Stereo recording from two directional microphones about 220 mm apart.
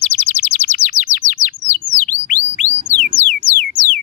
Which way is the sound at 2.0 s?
35° left (ahead or behind).